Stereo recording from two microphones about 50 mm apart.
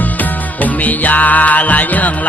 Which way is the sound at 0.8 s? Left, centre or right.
Left.